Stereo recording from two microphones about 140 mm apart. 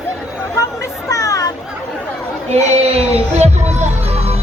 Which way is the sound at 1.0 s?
25° left (ahead or behind).